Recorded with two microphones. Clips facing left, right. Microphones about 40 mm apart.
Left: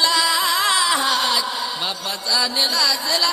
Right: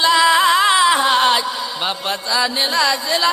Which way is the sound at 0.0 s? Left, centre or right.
Right.